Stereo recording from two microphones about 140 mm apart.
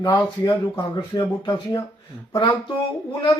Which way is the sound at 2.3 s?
35° left (ahead or behind).